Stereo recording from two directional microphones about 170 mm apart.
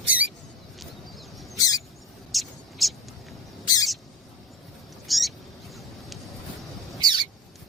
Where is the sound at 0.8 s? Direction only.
Centre (ahead or behind).